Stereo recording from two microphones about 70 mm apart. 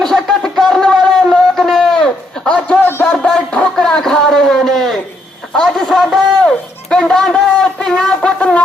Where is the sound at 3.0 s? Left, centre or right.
Centre.